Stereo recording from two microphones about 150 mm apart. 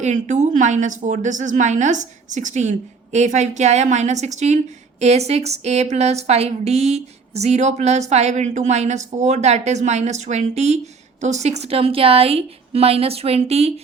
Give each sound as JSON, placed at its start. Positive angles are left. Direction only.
{"t": 0.0, "sound": "a woman's voice", "side_deg": -50}